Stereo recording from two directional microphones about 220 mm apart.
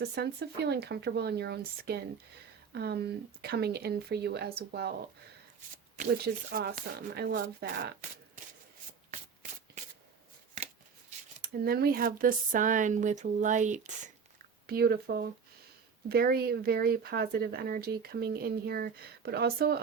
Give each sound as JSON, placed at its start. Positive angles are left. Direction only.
{"t": 0.0, "sound": "speech", "side_deg": -45}
{"t": 6.0, "sound": "speech", "side_deg": -45}
{"t": 9.0, "sound": "shuffling cards", "side_deg": -35}
{"t": 11.6, "sound": "speech", "side_deg": -45}